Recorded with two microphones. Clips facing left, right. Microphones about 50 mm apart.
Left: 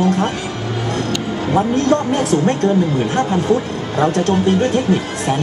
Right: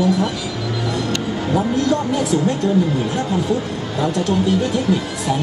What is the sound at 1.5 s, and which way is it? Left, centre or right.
Speech, left.